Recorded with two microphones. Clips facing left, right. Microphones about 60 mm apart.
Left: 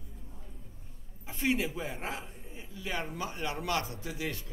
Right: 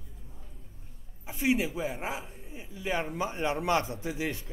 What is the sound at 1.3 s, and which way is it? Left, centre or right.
A man's voice, centre.